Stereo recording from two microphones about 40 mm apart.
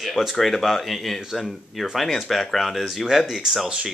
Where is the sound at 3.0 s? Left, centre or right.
Centre.